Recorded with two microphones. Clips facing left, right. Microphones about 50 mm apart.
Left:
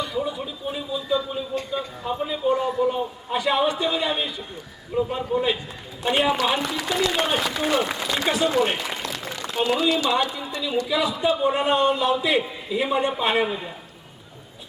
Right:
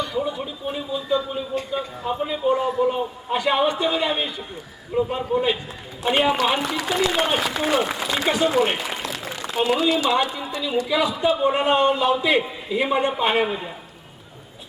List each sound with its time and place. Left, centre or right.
0.1 s a man's voice: centre
3.3 s a man's voice: centre
6.8 s a man's voice: right
8.9 s a sound: centre
10.1 s a man's voice: centre